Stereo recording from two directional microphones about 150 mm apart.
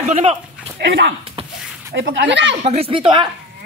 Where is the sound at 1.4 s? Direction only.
35° right (ahead or behind).